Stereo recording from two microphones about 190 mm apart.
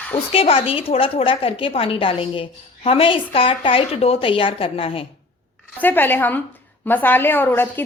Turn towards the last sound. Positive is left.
turn(degrees=10)  # may be behind; listen again after turning